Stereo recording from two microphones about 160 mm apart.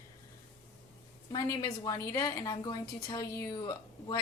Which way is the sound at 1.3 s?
25° left (ahead or behind).